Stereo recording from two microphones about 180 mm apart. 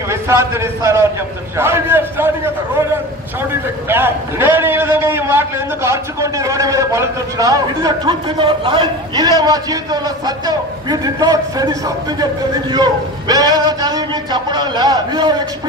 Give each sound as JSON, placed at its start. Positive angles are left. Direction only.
{"t": 0.1, "sound": "a man's voice", "side_deg": -15}
{"t": 3.9, "sound": "a man's voice", "side_deg": -10}